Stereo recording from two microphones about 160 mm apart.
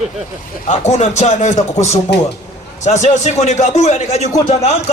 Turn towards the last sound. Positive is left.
turn(degrees=40)  # may be behind; listen again after turning